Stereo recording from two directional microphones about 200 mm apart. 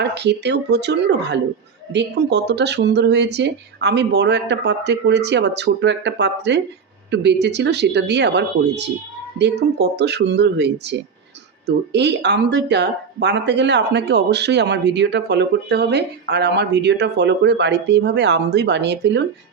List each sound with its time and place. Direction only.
0.0 s speech: 55° right (ahead or behind)